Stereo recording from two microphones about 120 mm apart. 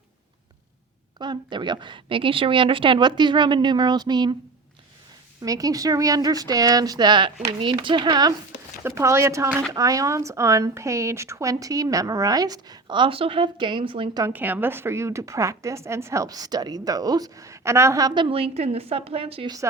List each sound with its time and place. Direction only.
1.2 s a woman's voice: 40° right (ahead or behind)
5.4 s a woman's voice: 30° right (ahead or behind)
8.8 s speech: 25° right (ahead or behind); by 14.3 s 40° right (ahead or behind)
14.3 s speech: 15° right (ahead or behind)
18.1 s a woman's voice: 45° right (ahead or behind)